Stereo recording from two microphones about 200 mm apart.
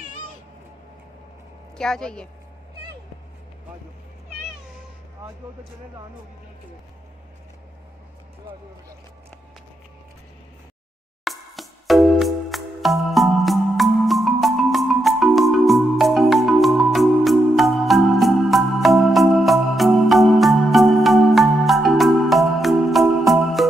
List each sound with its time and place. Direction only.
1.8 s a woman's voice: 5° left (ahead or behind)
11.2 s music: centre (ahead or behind)